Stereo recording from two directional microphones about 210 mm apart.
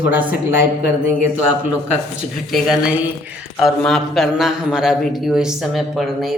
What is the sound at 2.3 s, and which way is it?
Speech, centre (ahead or behind).